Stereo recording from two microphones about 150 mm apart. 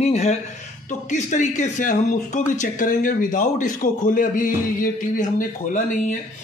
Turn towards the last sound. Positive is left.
turn(degrees=60)  # may be behind; listen again after turning